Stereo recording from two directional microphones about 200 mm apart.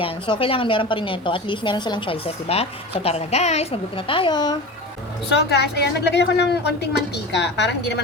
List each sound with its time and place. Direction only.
0.0 s a woman's voice: 25° left (ahead or behind)
5.3 s a woman's voice: 60° left (ahead or behind)